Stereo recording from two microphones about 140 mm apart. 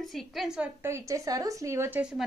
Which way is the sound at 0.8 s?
20° right (ahead or behind).